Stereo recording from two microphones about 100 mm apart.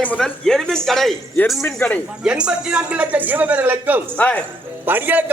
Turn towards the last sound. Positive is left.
turn(degrees=-20)  # may be behind; listen again after turning